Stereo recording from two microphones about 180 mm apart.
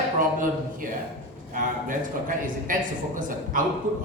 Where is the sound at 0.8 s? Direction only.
50° right (ahead or behind).